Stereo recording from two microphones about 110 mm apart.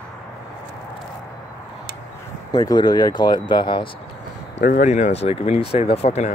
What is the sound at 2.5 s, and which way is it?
Speech, 40° left (ahead or behind).